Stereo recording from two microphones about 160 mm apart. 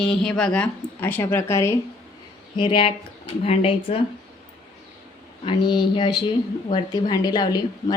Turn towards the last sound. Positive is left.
turn(degrees=25)  # may be behind; listen again after turning